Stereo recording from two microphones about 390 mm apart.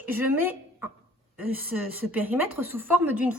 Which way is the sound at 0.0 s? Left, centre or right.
Centre.